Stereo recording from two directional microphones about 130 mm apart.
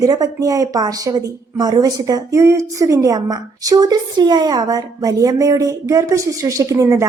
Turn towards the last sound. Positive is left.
turn(degrees=-25)  # may be behind; listen again after turning